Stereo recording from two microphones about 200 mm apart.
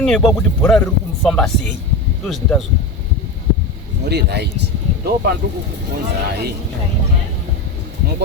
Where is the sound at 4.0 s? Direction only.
55° right (ahead or behind).